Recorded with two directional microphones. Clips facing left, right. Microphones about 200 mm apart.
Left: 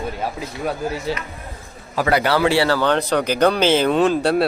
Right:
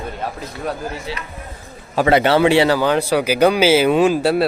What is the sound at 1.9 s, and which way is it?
A man's voice, 25° right (ahead or behind).